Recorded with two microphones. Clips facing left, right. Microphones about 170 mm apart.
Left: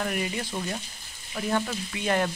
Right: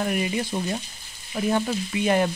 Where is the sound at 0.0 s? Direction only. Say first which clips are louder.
Right 4 dB; 20° right (ahead or behind).